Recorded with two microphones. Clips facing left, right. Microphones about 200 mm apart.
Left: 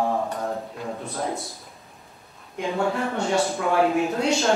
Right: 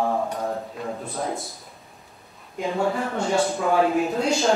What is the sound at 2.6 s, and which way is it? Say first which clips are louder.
Speech: right 1 dB; centre (ahead or behind).